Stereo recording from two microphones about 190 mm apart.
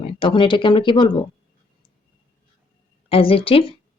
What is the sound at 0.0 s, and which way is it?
Speech, 30° left (ahead or behind).